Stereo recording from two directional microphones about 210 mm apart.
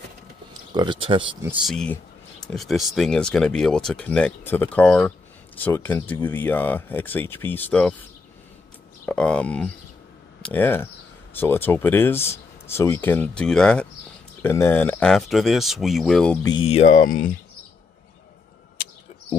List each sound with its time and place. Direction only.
0.7 s speech: 25° right (ahead or behind)
1.4 s speech: 5° right (ahead or behind)
9.0 s speech: 5° left (ahead or behind)
16.4 s speech: 25° left (ahead or behind)